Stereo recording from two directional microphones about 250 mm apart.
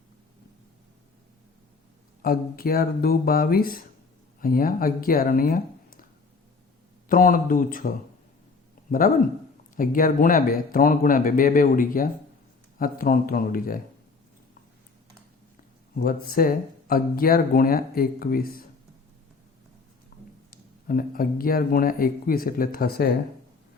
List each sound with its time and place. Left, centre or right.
2.2 s speech: left
7.1 s speech: left
16.0 s speech: left
20.1 s a sound: left
20.8 s speech: left